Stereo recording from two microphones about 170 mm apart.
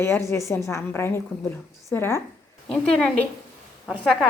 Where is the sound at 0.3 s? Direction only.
15° left (ahead or behind).